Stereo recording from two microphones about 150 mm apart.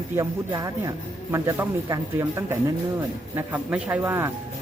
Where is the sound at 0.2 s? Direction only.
25° right (ahead or behind).